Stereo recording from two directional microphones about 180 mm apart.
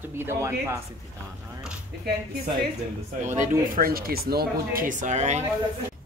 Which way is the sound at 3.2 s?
45° right (ahead or behind).